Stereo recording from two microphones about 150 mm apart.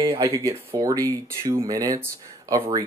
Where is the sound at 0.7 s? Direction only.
25° right (ahead or behind).